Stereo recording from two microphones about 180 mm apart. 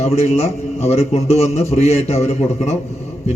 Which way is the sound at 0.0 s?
35° left (ahead or behind).